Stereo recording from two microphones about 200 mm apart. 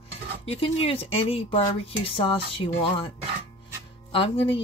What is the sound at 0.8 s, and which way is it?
Speech, 30° left (ahead or behind).